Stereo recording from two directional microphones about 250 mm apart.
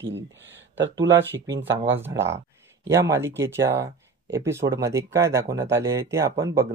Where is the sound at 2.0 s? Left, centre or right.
Centre.